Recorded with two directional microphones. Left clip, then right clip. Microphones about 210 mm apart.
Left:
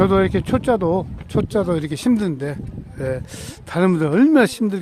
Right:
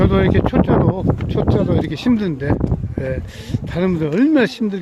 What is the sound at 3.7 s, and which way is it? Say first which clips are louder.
Speech: left 2 dB; 35° left (ahead or behind).